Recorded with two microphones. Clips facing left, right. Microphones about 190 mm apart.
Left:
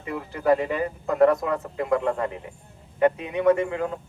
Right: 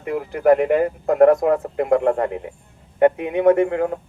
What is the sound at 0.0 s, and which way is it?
Speech, 60° right (ahead or behind).